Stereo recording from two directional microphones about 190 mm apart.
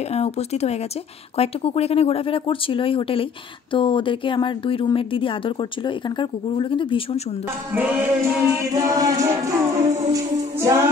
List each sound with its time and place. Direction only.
0.1 s speech: 35° left (ahead or behind)
7.7 s music: 10° right (ahead or behind)